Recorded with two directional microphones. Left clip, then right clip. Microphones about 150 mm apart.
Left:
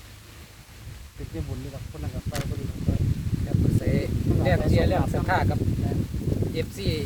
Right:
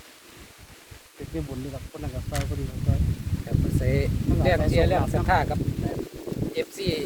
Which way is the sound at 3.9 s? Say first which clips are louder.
Right 1 dB; 10° right (ahead or behind).